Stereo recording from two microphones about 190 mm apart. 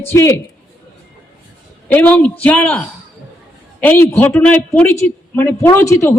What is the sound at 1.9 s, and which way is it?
A man's voice, 10° left (ahead or behind).